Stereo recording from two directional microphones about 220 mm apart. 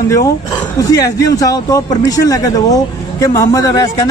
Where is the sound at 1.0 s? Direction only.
15° left (ahead or behind).